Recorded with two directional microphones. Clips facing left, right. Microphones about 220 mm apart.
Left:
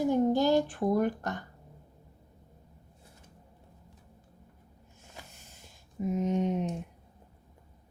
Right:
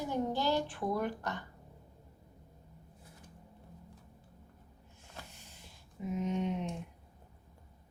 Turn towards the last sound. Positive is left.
turn(degrees=45)  # may be behind; listen again after turning